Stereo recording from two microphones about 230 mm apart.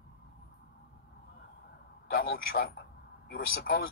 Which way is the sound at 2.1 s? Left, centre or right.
Left.